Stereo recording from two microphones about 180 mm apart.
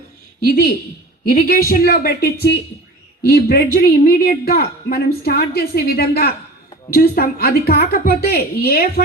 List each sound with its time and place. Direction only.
0.4 s a woman's voice: 55° left (ahead or behind)